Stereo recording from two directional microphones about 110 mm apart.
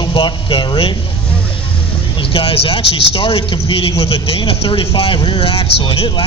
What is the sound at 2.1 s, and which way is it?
A man's voice, 55° left (ahead or behind).